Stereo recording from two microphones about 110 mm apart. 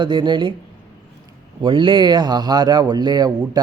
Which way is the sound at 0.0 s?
45° right (ahead or behind).